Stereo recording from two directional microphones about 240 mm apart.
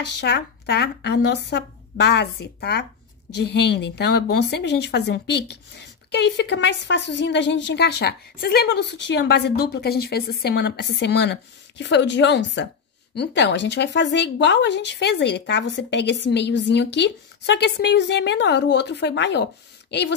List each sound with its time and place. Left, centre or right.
0.2 s a woman's voice: left